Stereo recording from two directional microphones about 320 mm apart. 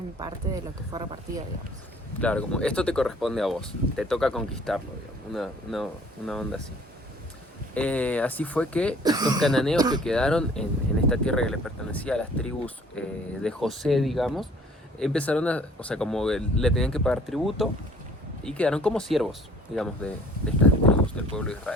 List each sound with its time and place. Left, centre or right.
0.2 s speech: centre
2.1 s speech: centre
7.7 s speech: centre
9.0 s speech: centre
9.4 s speech: centre
9.7 s speech: centre
10.0 s speech: centre